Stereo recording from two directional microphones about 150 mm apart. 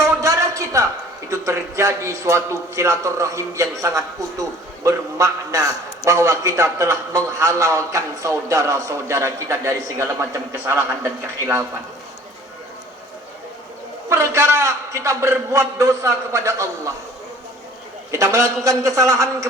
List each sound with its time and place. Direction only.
0.0 s a sound: 20° right (ahead or behind)
1.3 s a man's voice: 20° right (ahead or behind)
14.1 s a man's voice: 20° right (ahead or behind)
18.1 s a man's voice: 20° right (ahead or behind)